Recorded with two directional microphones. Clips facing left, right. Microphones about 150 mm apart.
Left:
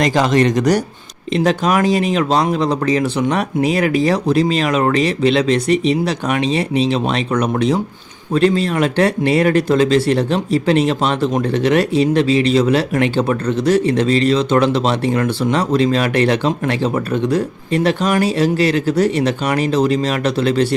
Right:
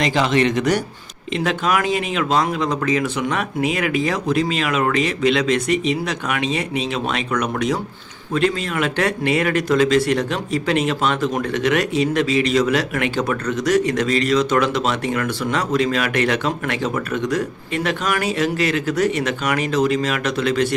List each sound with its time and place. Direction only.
0.0 s speech: 45° left (ahead or behind)